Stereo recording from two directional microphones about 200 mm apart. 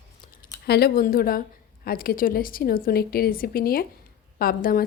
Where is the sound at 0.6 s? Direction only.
50° left (ahead or behind).